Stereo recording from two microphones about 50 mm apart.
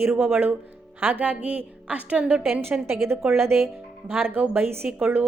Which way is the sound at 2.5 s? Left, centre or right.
Right.